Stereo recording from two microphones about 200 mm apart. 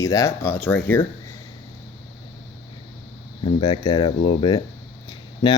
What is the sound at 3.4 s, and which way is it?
Speech, 20° left (ahead or behind).